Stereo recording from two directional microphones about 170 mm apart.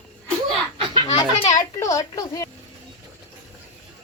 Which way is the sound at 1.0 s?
40° left (ahead or behind).